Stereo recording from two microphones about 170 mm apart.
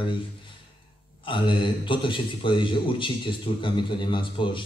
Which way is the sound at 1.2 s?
30° left (ahead or behind).